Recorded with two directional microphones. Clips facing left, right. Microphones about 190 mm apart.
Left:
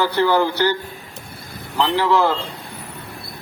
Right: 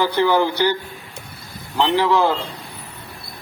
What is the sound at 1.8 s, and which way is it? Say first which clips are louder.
Speech: even; 15° right (ahead or behind).